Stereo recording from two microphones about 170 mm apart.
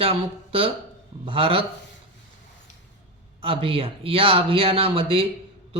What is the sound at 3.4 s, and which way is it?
Speech, 30° right (ahead or behind).